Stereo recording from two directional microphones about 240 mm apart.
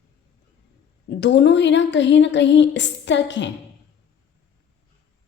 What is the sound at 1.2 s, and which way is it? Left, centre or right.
A woman's voice, left.